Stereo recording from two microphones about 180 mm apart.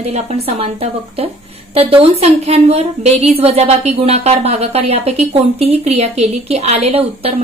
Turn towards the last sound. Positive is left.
turn(degrees=-35)  # may be behind; listen again after turning